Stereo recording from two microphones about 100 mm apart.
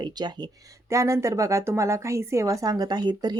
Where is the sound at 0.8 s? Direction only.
30° right (ahead or behind).